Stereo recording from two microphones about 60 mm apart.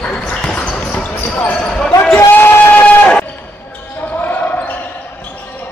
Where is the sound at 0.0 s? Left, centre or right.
Centre.